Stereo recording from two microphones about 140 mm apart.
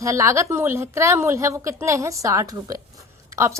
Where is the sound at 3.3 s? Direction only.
20° right (ahead or behind).